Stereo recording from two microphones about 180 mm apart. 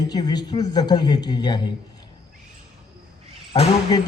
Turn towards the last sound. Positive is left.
turn(degrees=25)  # may be behind; listen again after turning